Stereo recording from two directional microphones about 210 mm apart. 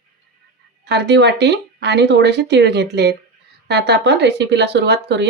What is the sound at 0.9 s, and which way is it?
Speech, 55° right (ahead or behind).